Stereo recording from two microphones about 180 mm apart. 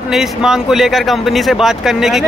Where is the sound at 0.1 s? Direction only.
Centre (ahead or behind).